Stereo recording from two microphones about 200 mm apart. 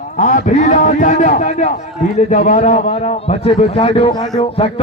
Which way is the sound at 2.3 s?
35° left (ahead or behind).